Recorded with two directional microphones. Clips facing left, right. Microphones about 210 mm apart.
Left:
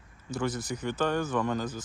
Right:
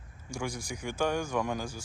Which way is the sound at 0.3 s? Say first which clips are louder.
Left 5 dB; 10° right (ahead or behind).